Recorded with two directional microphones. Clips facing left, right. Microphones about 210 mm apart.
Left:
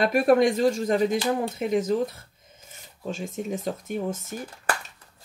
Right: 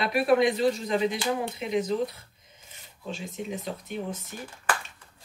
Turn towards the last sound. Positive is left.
turn(degrees=45)  # may be behind; listen again after turning